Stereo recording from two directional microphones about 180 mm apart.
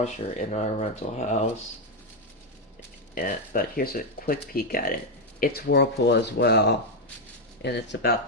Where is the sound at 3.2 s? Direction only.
50° left (ahead or behind); by 8.1 s 70° left (ahead or behind).